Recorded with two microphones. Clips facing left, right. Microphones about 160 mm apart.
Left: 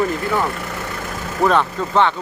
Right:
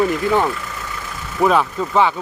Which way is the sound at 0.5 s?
60° left (ahead or behind).